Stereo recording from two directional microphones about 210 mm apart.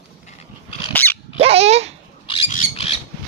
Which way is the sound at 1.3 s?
30° right (ahead or behind).